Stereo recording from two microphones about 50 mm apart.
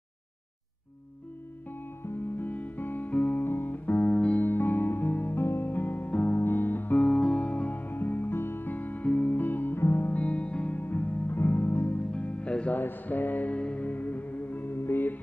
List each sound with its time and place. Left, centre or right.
2.3 s music: left
3.4 s music: left
4.1 s music: left
4.4 s music: left
5.4 s music: left
6.0 s music: left
6.3 s music: left
7.0 s music: centre; by 9.8 s left
9.8 s music: left
10.0 s music: left
10.8 s music: left
11.3 s music: left
12.0 s music: left
12.7 s music: left